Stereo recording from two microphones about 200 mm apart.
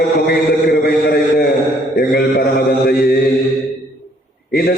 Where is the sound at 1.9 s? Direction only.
50° left (ahead or behind).